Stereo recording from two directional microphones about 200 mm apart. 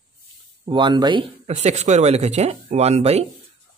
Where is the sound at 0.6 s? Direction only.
25° right (ahead or behind).